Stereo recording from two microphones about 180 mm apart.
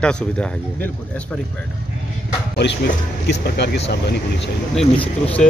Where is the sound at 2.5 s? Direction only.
70° left (ahead or behind).